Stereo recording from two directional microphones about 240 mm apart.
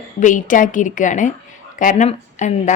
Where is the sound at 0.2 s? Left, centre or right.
Left.